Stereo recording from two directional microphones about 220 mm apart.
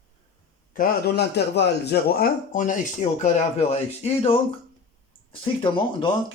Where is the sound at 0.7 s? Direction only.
40° left (ahead or behind).